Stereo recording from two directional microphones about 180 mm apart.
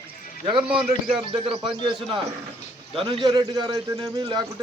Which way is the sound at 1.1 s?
25° right (ahead or behind).